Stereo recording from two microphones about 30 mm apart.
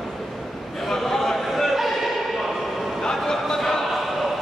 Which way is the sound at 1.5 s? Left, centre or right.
Centre.